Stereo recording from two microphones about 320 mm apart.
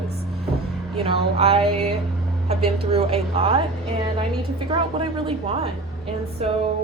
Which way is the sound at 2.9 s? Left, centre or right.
Centre.